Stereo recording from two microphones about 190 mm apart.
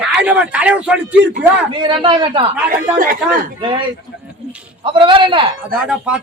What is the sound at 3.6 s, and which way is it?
Speech, 25° right (ahead or behind).